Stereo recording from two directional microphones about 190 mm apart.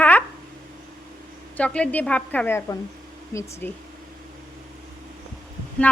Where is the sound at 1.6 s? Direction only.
5° left (ahead or behind).